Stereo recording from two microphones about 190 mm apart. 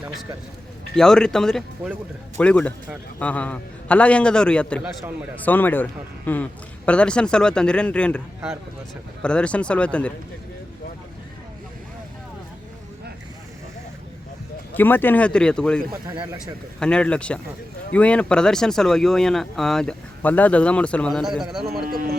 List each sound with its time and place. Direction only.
0.9 s a man's voice: 5° left (ahead or behind)
9.2 s speech: 5° left (ahead or behind)
14.7 s a man's voice: 10° left (ahead or behind)
16.8 s speech: 5° left (ahead or behind)
21.7 s speech: 50° right (ahead or behind)